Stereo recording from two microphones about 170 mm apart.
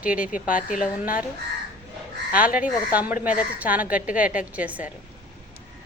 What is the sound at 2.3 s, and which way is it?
A woman's voice, 10° right (ahead or behind).